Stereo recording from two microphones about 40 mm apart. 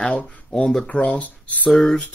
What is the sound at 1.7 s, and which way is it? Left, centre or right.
Speech, centre.